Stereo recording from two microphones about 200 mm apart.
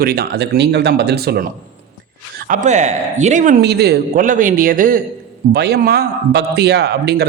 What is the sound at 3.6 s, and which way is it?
Speech, 55° right (ahead or behind).